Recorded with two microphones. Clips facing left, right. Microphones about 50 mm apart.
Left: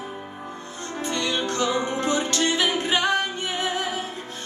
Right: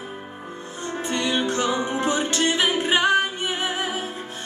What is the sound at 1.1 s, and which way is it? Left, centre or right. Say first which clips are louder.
Music: right 2 dB; right.